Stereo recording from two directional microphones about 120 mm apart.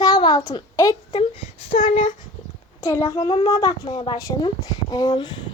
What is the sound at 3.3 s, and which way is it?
A child's voice, 45° left (ahead or behind).